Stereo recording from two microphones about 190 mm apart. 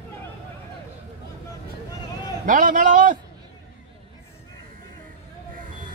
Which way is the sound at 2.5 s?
45° right (ahead or behind).